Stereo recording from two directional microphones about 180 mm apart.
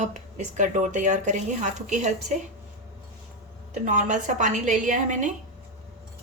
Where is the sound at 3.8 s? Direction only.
45° right (ahead or behind).